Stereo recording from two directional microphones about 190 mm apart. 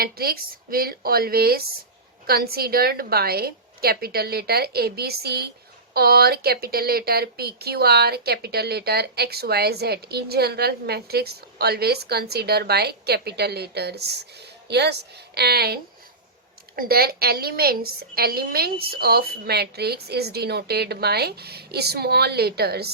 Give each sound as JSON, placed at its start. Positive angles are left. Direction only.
{"t": 0.0, "sound": "speech", "side_deg": -50}